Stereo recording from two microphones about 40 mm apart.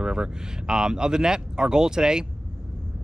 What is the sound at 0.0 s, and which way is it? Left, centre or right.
Speech, right.